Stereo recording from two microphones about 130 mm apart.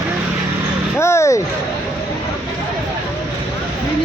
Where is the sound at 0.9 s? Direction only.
20° left (ahead or behind).